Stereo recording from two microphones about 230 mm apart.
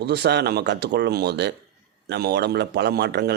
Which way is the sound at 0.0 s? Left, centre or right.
Right.